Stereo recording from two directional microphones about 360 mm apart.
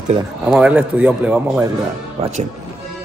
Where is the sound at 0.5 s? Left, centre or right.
Centre.